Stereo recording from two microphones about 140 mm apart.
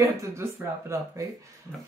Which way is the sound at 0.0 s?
20° right (ahead or behind).